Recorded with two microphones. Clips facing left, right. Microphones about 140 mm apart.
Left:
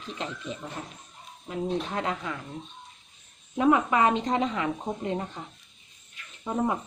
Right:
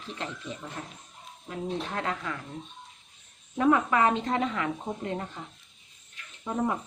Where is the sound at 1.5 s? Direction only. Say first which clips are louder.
Left 3 dB; 15° left (ahead or behind).